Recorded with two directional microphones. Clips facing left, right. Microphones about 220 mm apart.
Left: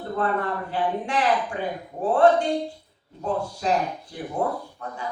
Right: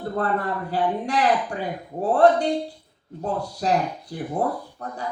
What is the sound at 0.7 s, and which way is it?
A woman's voice, 40° right (ahead or behind).